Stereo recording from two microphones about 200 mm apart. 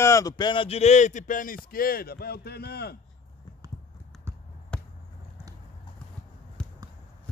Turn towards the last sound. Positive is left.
turn(degrees=5)  # may be behind; listen again after turning